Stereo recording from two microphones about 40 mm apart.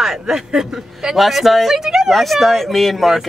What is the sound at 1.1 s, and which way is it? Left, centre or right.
Speech, centre.